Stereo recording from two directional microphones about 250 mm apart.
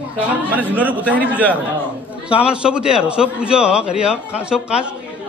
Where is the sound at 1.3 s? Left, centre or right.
Centre.